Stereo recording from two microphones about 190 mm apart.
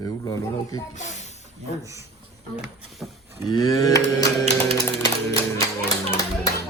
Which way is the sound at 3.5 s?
20° left (ahead or behind).